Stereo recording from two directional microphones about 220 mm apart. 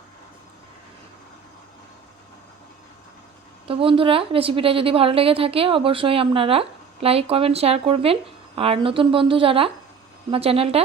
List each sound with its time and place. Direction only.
3.7 s a woman's voice: 25° right (ahead or behind)